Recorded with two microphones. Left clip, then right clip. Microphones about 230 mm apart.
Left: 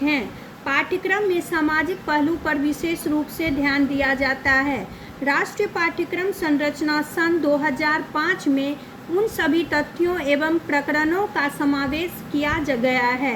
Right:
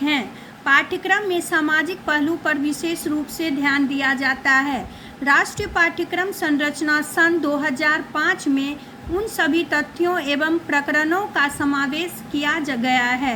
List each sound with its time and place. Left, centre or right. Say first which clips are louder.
1.0 s a woman's voice: right 1 dB; right